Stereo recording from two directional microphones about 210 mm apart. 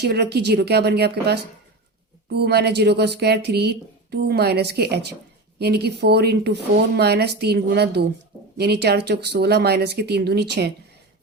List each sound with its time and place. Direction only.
0.0 s speech: 50° right (ahead or behind)